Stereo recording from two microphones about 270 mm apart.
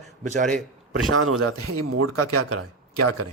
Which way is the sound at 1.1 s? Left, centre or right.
Right.